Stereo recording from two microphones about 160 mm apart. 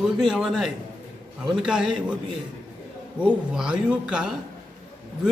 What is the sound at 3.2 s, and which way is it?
A man's voice, 5° right (ahead or behind).